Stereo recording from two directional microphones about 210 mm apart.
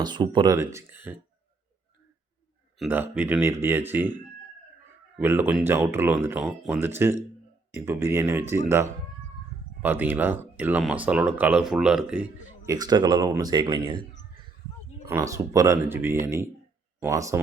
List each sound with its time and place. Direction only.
0.0 s speech: 20° right (ahead or behind)
2.7 s speech: 5° right (ahead or behind)
5.1 s speech: 10° right (ahead or behind)
12.6 s speech: 20° right (ahead or behind)
15.1 s speech: 15° right (ahead or behind)